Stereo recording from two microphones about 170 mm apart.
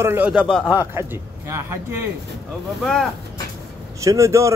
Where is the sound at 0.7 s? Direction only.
15° right (ahead or behind).